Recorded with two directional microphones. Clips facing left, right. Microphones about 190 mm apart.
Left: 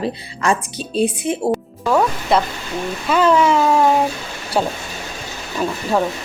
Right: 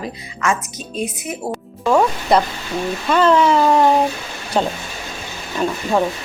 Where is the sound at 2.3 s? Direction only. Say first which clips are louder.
Right 2 dB; centre (ahead or behind).